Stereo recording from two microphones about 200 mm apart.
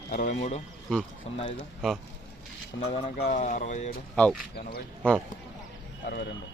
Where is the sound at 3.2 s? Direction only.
40° left (ahead or behind).